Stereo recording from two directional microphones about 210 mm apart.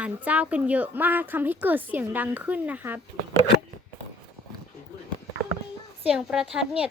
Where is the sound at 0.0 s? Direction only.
5° right (ahead or behind).